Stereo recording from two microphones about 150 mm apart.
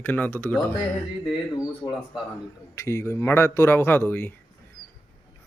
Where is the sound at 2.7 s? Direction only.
20° left (ahead or behind).